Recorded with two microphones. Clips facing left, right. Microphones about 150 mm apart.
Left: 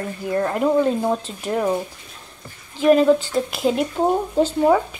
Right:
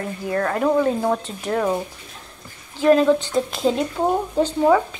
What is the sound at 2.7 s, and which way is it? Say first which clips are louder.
Speech: left 1 dB; 15° left (ahead or behind).